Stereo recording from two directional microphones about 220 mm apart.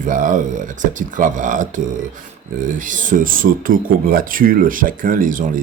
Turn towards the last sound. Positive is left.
turn(degrees=-35)  # may be behind; listen again after turning